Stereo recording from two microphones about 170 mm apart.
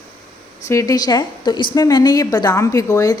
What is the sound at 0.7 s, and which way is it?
A woman's voice, 20° left (ahead or behind).